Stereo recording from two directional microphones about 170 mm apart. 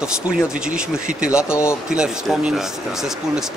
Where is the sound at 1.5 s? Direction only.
15° left (ahead or behind).